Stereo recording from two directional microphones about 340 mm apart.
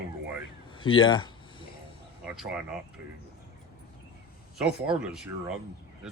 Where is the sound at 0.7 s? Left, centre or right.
Centre.